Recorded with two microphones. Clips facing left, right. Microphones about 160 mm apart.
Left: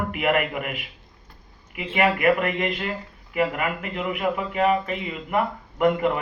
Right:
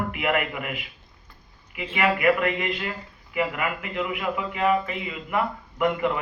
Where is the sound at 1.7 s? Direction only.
40° left (ahead or behind).